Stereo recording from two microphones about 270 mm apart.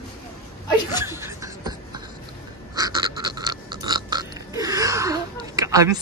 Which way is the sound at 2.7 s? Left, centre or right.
Centre.